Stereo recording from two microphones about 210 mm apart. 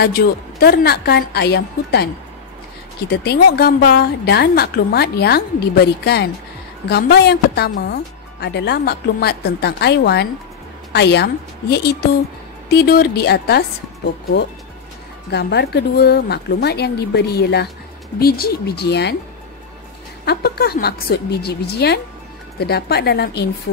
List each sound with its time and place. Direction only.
0.0 s speech: 50° left (ahead or behind)
3.1 s a woman's voice: 50° left (ahead or behind)
12.6 s speech: 50° left (ahead or behind)
15.3 s speech: 50° left (ahead or behind)
20.2 s speech: 45° left (ahead or behind)